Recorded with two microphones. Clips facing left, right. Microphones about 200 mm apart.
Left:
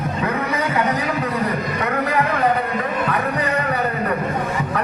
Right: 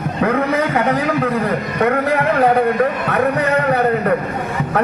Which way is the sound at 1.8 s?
55° right (ahead or behind).